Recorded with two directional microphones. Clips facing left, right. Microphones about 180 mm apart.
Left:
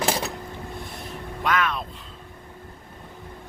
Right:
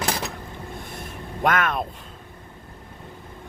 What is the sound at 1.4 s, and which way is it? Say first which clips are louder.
Vehicle: right 2 dB; 50° right (ahead or behind).